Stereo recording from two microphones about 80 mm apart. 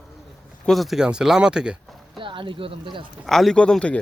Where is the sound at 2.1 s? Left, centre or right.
Right.